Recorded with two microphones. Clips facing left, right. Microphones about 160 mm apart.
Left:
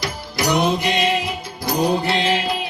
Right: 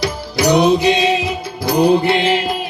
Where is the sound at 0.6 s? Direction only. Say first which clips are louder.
Right 6 dB; 75° right (ahead or behind).